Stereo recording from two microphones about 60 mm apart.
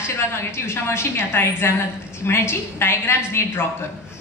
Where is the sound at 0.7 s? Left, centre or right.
Left.